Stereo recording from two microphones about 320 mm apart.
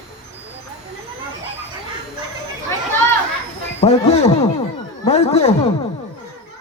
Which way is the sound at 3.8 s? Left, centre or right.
Centre.